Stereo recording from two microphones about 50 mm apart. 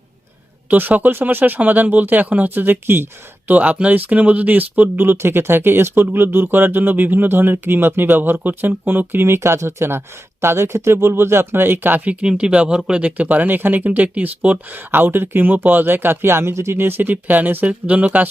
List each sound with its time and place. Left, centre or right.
0.7 s speech: right
3.5 s speech: right
5.1 s speech: right
12.2 s speech: centre
14.8 s speech: right
16.7 s speech: right